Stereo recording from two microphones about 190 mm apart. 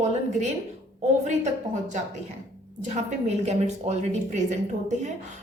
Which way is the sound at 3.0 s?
35° right (ahead or behind).